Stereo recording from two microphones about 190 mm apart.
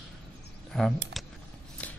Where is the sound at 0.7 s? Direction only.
Centre (ahead or behind).